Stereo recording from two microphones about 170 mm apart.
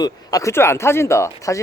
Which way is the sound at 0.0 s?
20° left (ahead or behind).